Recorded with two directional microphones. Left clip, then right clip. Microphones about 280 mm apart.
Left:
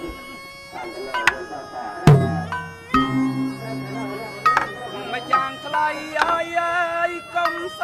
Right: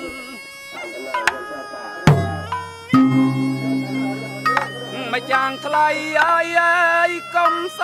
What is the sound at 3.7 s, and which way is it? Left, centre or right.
Music, right.